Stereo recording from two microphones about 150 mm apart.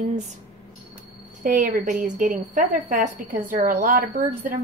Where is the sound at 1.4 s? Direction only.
60° right (ahead or behind).